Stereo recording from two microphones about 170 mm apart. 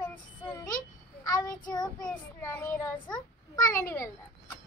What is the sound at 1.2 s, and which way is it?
Child singing, 20° left (ahead or behind).